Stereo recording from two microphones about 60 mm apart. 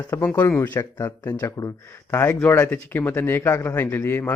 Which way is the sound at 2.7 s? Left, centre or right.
Left.